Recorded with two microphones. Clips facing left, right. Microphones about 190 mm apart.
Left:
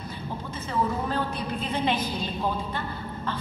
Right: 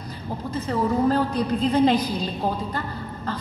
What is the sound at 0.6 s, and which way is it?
A woman's voice, 40° right (ahead or behind).